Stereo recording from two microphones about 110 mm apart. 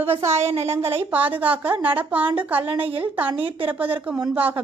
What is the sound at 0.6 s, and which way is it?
A woman's voice, 20° right (ahead or behind).